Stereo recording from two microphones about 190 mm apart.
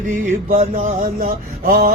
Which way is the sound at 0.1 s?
40° right (ahead or behind).